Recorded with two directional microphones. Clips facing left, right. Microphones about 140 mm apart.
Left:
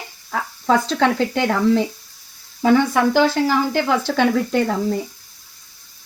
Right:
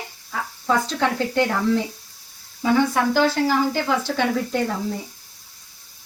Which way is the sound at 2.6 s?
70° left (ahead or behind).